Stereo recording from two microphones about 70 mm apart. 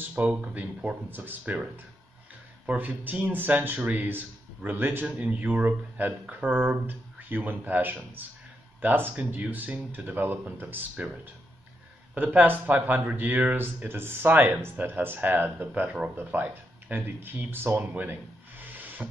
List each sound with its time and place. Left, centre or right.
0.1 s speech: right
12.1 s speech: right
13.8 s speech: right
17.9 s a sound: right